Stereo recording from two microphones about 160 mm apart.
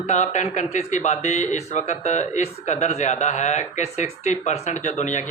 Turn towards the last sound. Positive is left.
turn(degrees=50)  # may be behind; listen again after turning